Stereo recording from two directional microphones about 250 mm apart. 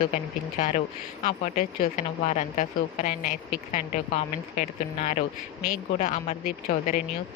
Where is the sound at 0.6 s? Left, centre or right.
Left.